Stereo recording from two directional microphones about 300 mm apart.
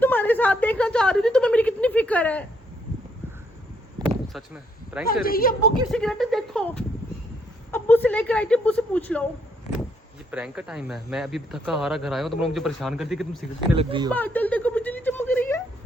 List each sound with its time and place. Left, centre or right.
0.0 s a sound: centre
4.3 s speech: centre
5.2 s a woman's voice: left
5.9 s speech: centre
10.3 s speech: centre
13.7 s speech: centre
14.1 s a sound: centre